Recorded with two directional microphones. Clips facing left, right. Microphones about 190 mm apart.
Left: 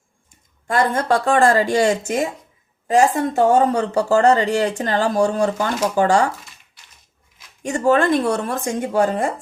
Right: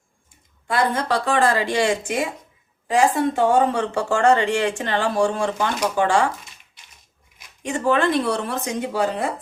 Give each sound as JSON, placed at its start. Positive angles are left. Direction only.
{"t": 0.7, "sound": "speech", "side_deg": 45}
{"t": 7.6, "sound": "speech", "side_deg": 45}